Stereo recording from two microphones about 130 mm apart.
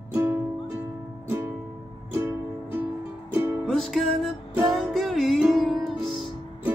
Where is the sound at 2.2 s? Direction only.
15° right (ahead or behind).